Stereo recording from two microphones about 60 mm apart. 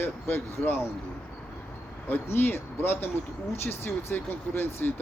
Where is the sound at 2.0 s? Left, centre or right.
Left.